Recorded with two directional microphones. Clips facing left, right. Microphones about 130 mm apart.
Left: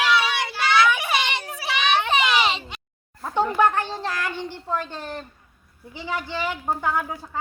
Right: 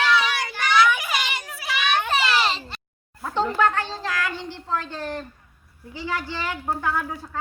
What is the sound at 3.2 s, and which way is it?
A woman's voice, 10° left (ahead or behind).